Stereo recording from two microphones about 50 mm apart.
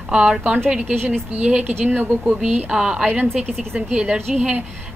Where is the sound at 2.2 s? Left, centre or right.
Centre.